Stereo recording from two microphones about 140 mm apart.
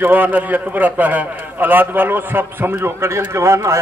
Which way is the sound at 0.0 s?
15° right (ahead or behind).